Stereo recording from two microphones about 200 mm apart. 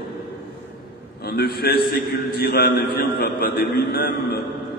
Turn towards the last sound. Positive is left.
turn(degrees=50)  # may be behind; listen again after turning